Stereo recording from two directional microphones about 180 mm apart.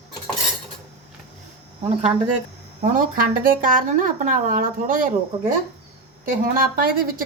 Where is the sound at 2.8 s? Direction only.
50° right (ahead or behind).